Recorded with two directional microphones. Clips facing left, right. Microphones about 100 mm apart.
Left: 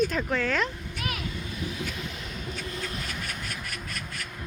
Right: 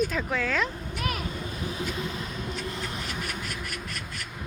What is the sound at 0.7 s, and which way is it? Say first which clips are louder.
Vehicle: right 3 dB; 40° right (ahead or behind).